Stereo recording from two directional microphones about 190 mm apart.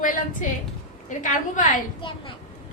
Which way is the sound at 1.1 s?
40° left (ahead or behind).